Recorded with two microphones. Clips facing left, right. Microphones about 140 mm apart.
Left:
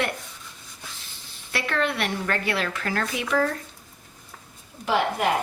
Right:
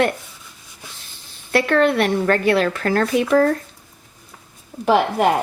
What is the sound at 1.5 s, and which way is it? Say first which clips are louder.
A woman's voice: right 10 dB; 45° right (ahead or behind).